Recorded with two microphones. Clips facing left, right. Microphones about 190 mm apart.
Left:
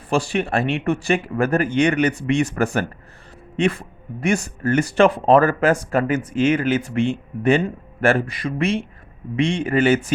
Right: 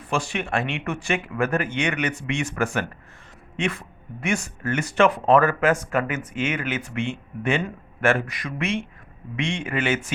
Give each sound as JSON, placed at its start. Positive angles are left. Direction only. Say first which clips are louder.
{"t": 0.1, "sound": "speech", "louder": "left 5 dB", "side_deg": 35}